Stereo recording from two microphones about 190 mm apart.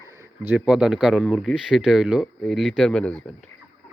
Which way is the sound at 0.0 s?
15° right (ahead or behind).